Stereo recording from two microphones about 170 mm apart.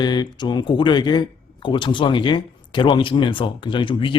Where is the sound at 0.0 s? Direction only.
25° left (ahead or behind).